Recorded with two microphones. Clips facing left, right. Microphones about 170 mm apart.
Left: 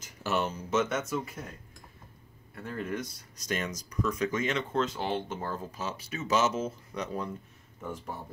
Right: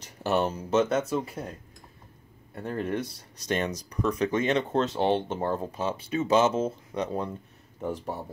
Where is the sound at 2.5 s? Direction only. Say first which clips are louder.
Right 5 dB; 35° right (ahead or behind).